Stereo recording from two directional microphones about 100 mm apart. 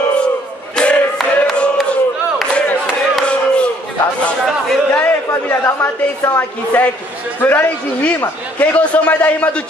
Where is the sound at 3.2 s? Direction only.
10° left (ahead or behind).